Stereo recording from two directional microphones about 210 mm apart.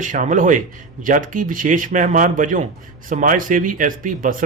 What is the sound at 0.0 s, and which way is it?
A man's voice, 40° right (ahead or behind).